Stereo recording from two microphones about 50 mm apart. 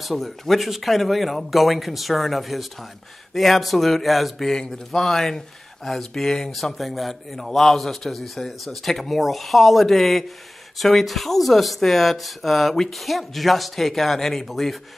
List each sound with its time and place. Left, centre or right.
0.0 s speech: centre